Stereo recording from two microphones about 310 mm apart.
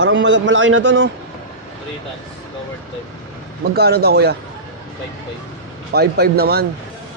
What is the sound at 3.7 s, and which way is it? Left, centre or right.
Speech, right.